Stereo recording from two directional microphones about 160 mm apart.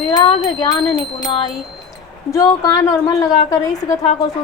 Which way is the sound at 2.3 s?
20° left (ahead or behind).